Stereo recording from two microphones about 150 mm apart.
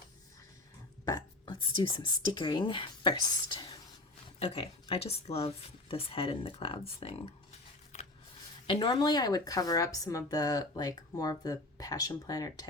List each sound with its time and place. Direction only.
1.0 s burping: 25° left (ahead or behind)
2.0 s speech: 30° left (ahead or behind)
8.6 s speech: 30° left (ahead or behind)